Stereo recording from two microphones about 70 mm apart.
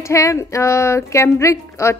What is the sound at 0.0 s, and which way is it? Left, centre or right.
A woman's voice, left.